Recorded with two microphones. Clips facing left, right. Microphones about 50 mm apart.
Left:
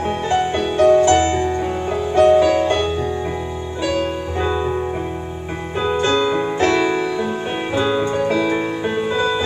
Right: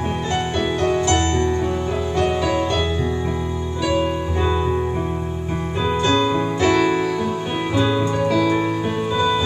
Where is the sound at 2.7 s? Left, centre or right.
Left.